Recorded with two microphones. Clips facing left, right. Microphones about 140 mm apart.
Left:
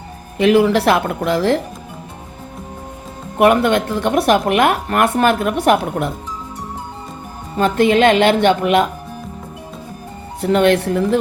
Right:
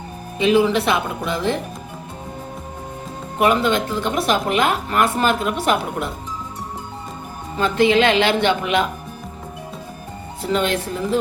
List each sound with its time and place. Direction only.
0.3 s speech: 70° left (ahead or behind); by 1.6 s 90° left
3.3 s speech: 60° left (ahead or behind)
7.6 s speech: 50° left (ahead or behind)
10.4 s speech: 60° left (ahead or behind)